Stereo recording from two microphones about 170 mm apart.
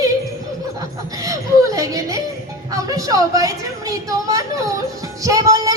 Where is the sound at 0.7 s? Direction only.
20° right (ahead or behind).